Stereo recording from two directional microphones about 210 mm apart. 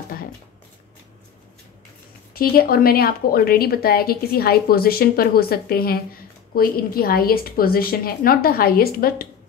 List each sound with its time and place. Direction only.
2.3 s a woman's voice: 45° left (ahead or behind)